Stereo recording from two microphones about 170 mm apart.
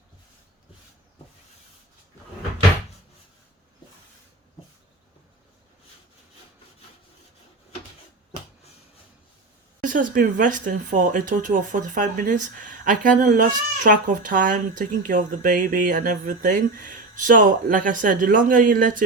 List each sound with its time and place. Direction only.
9.8 s speech: 50° right (ahead or behind)